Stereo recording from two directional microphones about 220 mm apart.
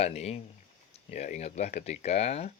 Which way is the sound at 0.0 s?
30° left (ahead or behind).